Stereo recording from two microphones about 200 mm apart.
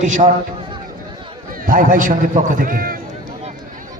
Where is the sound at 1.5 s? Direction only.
45° right (ahead or behind).